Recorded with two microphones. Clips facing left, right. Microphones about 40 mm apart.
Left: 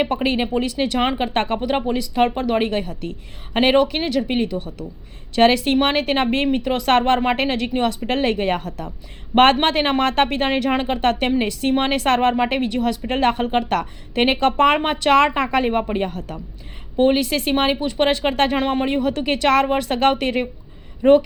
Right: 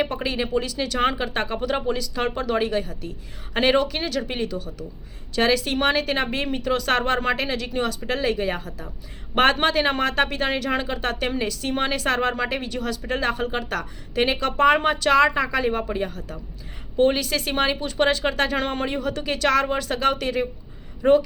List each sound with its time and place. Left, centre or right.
0.0 s a woman's voice: left
1.5 s a woman's voice: left
3.5 s a woman's voice: left
9.3 s a woman's voice: left
18.5 s speech: centre
18.9 s a woman's voice: left
21.0 s speech: left